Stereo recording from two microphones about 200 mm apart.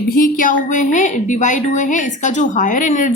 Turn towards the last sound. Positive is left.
turn(degrees=35)  # may be behind; listen again after turning